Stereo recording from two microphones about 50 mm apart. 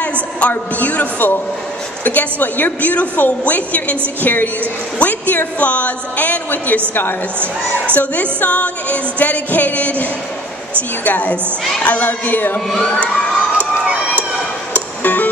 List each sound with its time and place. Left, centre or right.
0.0 s a woman's voice: left
7.9 s music: left
12.1 s a woman's voice: left
14.7 s music: left